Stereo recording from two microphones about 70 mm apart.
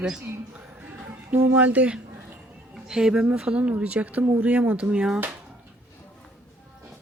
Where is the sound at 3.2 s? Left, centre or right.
Centre.